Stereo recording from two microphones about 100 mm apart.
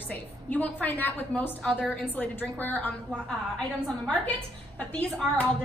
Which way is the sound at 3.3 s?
5° left (ahead or behind).